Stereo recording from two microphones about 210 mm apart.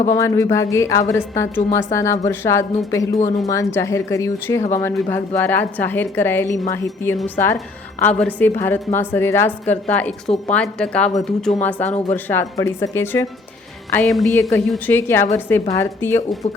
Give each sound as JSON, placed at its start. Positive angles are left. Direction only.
{"t": 0.1, "sound": "a woman's voice", "side_deg": 15}
{"t": 3.2, "sound": "speech", "side_deg": 35}
{"t": 3.4, "sound": "a woman's voice", "side_deg": 15}
{"t": 13.9, "sound": "a woman's voice", "side_deg": 0}